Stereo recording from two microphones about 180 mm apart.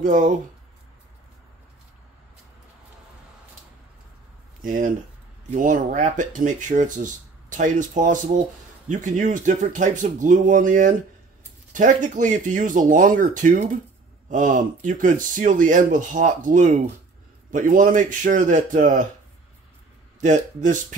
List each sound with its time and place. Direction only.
0.0 s speech: 45° right (ahead or behind)
4.6 s speech: 50° right (ahead or behind)
20.2 s speech: 40° right (ahead or behind)